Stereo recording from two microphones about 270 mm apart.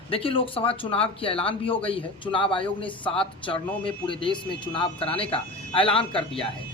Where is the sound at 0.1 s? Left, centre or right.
Centre.